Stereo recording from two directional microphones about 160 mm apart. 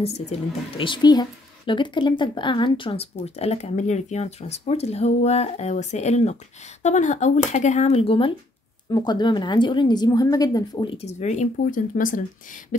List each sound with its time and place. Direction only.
0.0 s a woman's voice: 40° left (ahead or behind); by 12.2 s 55° left (ahead or behind)